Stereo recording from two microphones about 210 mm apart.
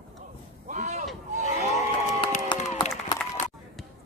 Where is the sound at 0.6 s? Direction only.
35° right (ahead or behind).